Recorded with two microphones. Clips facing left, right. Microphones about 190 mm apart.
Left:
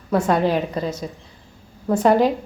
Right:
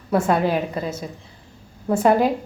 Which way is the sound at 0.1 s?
5° right (ahead or behind).